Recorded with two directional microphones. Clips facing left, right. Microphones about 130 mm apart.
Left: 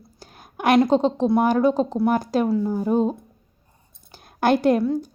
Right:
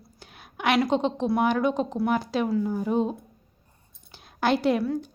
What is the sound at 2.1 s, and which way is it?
Speech, 45° left (ahead or behind).